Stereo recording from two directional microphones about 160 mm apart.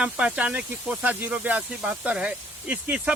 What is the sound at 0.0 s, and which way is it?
Speech, 5° right (ahead or behind).